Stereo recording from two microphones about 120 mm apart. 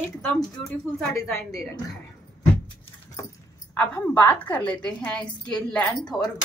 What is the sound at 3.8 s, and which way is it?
A woman's voice, 15° left (ahead or behind).